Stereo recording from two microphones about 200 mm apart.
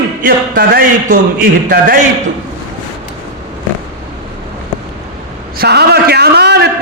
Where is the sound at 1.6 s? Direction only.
45° right (ahead or behind).